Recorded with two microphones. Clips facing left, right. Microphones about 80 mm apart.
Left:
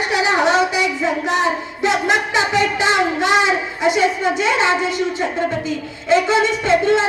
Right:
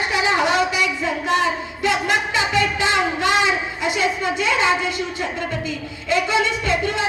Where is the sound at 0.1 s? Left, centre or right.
Centre.